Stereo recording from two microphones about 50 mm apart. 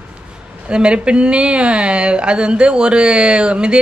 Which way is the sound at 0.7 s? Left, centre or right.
Centre.